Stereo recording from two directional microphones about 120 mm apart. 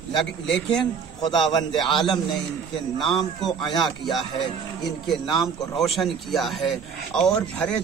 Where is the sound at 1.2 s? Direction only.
35° left (ahead or behind).